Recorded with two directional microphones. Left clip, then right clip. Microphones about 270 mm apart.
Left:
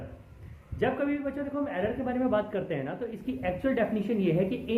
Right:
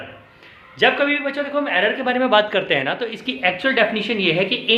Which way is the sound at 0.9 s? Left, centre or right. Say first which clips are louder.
Right 11 dB; centre.